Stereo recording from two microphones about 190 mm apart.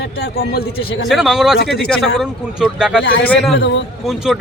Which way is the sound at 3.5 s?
65° left (ahead or behind).